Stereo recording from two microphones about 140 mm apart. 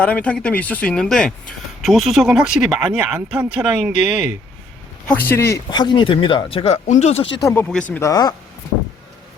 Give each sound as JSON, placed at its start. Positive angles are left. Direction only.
{"t": 0.0, "sound": "speech", "side_deg": 10}
{"t": 5.0, "sound": "a man's voice", "side_deg": 15}
{"t": 5.7, "sound": "speech", "side_deg": 30}
{"t": 7.4, "sound": "a man's voice", "side_deg": 15}
{"t": 8.0, "sound": "speech", "side_deg": 25}